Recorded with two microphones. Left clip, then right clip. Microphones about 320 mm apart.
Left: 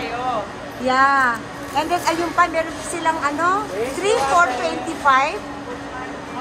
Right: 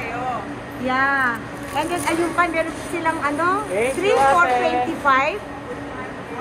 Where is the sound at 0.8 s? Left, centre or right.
Centre.